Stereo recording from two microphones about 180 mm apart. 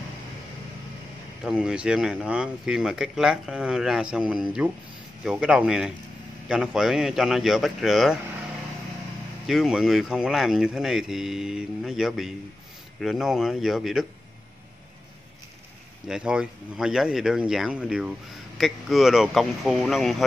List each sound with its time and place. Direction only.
1.4 s speech: 5° right (ahead or behind)
9.5 s speech: centre (ahead or behind)
16.1 s speech: 5° right (ahead or behind)